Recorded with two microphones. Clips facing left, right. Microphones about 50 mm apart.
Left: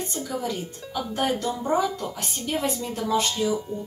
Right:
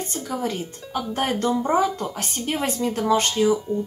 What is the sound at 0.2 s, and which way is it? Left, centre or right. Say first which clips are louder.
Speech: right 3 dB; right.